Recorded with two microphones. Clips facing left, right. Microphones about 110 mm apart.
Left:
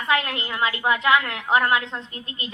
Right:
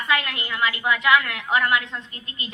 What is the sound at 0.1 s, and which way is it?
A woman's voice, 35° left (ahead or behind).